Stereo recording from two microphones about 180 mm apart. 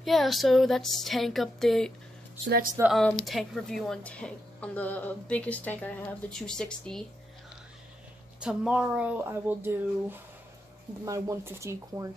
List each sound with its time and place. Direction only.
0.0 s speech: centre (ahead or behind)
2.9 s speech: 5° left (ahead or behind)
8.4 s speech: 5° right (ahead or behind)